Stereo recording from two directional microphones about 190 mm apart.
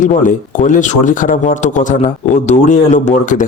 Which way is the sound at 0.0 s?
45° left (ahead or behind).